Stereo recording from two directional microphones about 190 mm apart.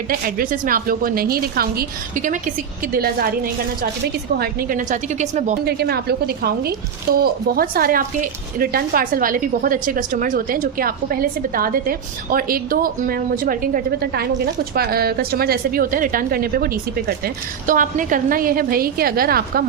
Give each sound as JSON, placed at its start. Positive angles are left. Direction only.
{"t": 0.1, "sound": "a woman's voice", "side_deg": -50}
{"t": 5.6, "sound": "a woman's voice", "side_deg": -55}